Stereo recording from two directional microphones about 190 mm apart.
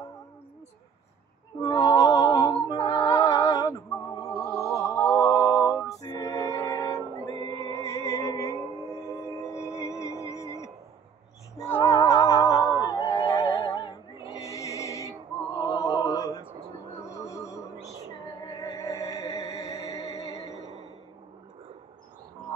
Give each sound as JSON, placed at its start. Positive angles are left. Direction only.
{"t": 1.6, "sound": "music", "side_deg": 20}
{"t": 4.7, "sound": "a sound", "side_deg": 15}
{"t": 5.9, "sound": "music", "side_deg": 20}
{"t": 15.5, "sound": "a sound", "side_deg": 20}
{"t": 17.3, "sound": "music", "side_deg": 15}
{"t": 18.6, "sound": "music", "side_deg": 15}
{"t": 19.9, "sound": "music", "side_deg": 30}
{"t": 20.2, "sound": "music", "side_deg": 15}